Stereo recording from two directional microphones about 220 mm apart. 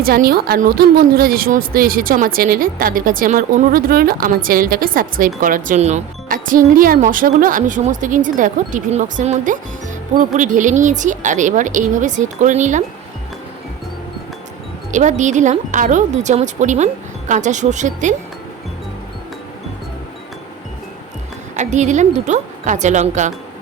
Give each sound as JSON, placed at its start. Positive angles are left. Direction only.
{"t": 0.0, "sound": "a woman's voice", "side_deg": -45}
{"t": 14.9, "sound": "a woman's voice", "side_deg": -35}
{"t": 21.5, "sound": "a woman's voice", "side_deg": -35}